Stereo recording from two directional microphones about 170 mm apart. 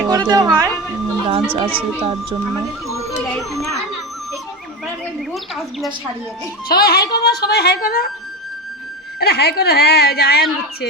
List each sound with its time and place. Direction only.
0.1 s speech: 25° right (ahead or behind)
5.3 s speech: centre (ahead or behind)
6.7 s speech: 65° left (ahead or behind)
9.2 s speech: 70° left (ahead or behind)